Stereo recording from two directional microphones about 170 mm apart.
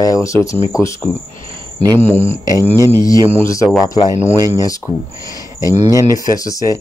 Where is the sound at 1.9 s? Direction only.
15° left (ahead or behind).